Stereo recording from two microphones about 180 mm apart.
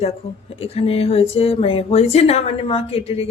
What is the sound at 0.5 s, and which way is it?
A woman's voice, 35° left (ahead or behind).